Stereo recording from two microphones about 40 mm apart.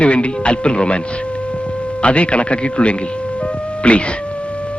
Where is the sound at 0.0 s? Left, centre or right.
Left.